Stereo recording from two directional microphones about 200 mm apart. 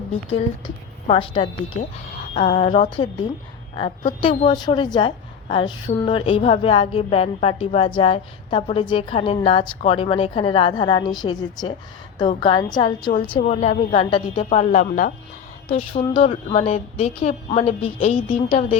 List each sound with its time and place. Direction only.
1.0 s a woman's voice: 30° left (ahead or behind)
4.2 s a woman's voice: 25° left (ahead or behind)
15.7 s a woman's voice: 25° left (ahead or behind)